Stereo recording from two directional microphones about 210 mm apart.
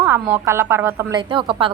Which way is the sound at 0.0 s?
10° right (ahead or behind).